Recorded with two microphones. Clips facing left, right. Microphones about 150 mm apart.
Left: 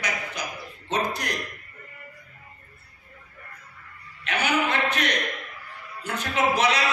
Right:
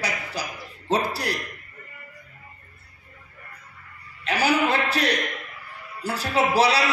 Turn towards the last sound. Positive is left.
turn(degrees=-35)  # may be behind; listen again after turning